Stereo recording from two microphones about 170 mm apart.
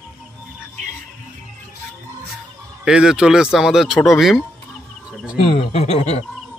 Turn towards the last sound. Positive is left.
turn(degrees=40)  # may be behind; listen again after turning